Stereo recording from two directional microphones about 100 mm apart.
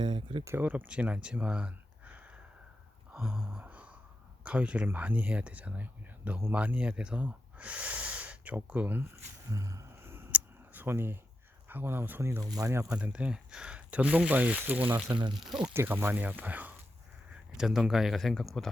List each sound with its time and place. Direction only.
0.0 s speech: 55° right (ahead or behind)
0.6 s speech: 15° right (ahead or behind)
3.1 s a sound: 5° right (ahead or behind)
4.4 s speech: 10° right (ahead or behind)
9.5 s a sound: 35° right (ahead or behind)
11.7 s speech: 20° right (ahead or behind)
12.4 s speech: 35° right (ahead or behind)
13.1 s speech: 10° right (ahead or behind)
15.1 s speech: 50° right (ahead or behind)
15.4 s speech: 5° right (ahead or behind)
15.7 s speech: 25° right (ahead or behind)
17.3 s speech: 5° right (ahead or behind)